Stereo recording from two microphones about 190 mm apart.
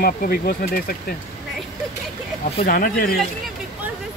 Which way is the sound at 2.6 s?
50° left (ahead or behind).